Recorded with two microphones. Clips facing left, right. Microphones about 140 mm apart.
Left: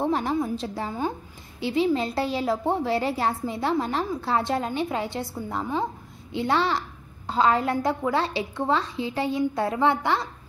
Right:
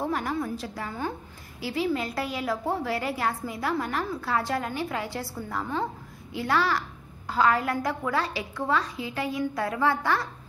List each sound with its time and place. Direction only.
0.0 s a woman's voice: 25° left (ahead or behind)